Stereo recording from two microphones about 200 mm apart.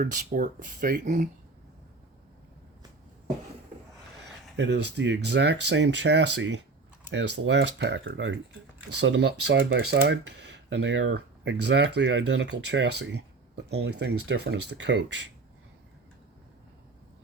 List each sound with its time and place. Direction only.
0.0 s speech: 40° right (ahead or behind)
4.5 s speech: 60° right (ahead or behind)
10.0 s speech: 60° right (ahead or behind)